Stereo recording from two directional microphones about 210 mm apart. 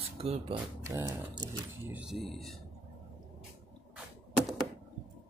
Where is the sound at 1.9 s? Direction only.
5° right (ahead or behind).